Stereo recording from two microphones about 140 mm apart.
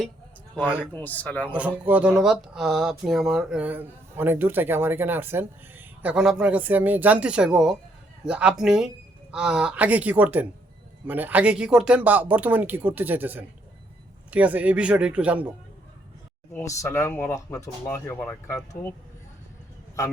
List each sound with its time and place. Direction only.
0.5 s speech: 10° left (ahead or behind)
1.5 s speech: 10° right (ahead or behind)
16.5 s speech: 20° left (ahead or behind)